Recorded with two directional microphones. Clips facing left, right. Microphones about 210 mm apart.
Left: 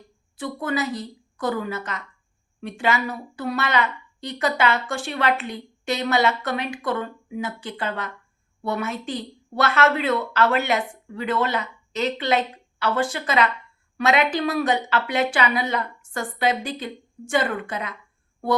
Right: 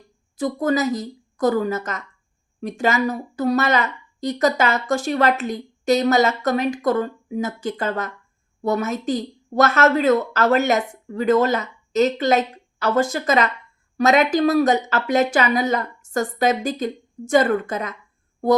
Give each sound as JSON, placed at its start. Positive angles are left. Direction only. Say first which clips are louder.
{"t": 0.3, "sound": "a woman's voice", "louder": "right 6 dB", "side_deg": -40}